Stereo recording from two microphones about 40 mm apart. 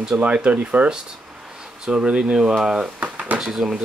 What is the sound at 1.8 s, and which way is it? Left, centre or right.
Speech, right.